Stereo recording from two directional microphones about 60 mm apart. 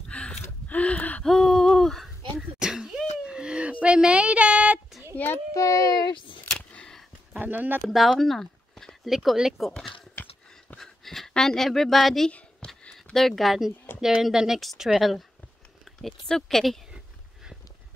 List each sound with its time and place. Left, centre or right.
0.1 s gasp: left
1.2 s hoot: centre
2.6 s a sound: centre
5.1 s child singing: left
5.5 s a child's voice: left
6.4 s a sound: centre
7.3 s speech: right
8.2 s a sound: centre
9.0 s speech: centre
10.8 s speech: centre
12.6 s a sound: centre
13.1 s speech: centre
14.6 s speech: centre